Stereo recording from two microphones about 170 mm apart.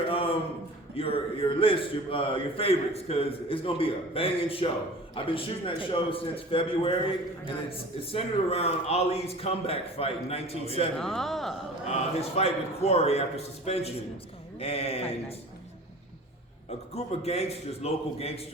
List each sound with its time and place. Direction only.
0.1 s a sound: 35° left (ahead or behind)
0.9 s a man's voice: 35° left (ahead or behind)
8.1 s a man's voice: 35° left (ahead or behind)
10.9 s speech: centre (ahead or behind)
11.9 s a man's voice: 40° left (ahead or behind)
16.9 s a man's voice: 35° left (ahead or behind)